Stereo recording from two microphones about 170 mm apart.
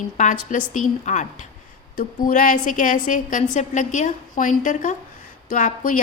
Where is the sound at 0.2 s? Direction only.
50° left (ahead or behind).